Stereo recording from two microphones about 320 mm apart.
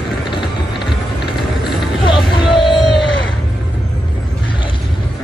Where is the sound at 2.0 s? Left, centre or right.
Centre.